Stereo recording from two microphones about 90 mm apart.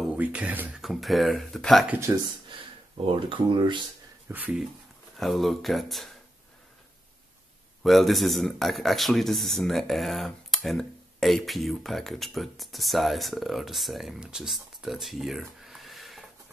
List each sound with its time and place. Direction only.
0.1 s speech: 15° right (ahead or behind)
0.7 s a man's voice: centre (ahead or behind)
3.1 s speech: 70° right (ahead or behind)
4.3 s speech: 20° right (ahead or behind)
5.1 s a man's voice: centre (ahead or behind)
7.8 s a man's voice: centre (ahead or behind)